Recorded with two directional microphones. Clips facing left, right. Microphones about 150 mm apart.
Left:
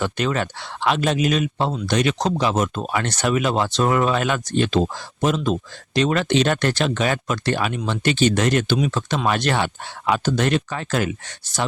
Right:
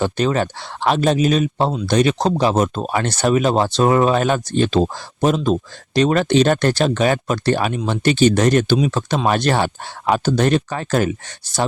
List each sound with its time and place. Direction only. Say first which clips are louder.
0.0 s speech: right 4 dB; 35° right (ahead or behind)